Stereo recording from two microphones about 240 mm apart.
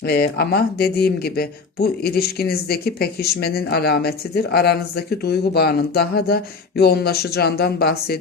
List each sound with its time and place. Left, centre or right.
0.0 s speech: left